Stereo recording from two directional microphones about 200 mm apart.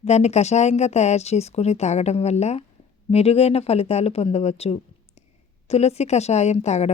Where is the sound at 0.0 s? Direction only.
35° left (ahead or behind).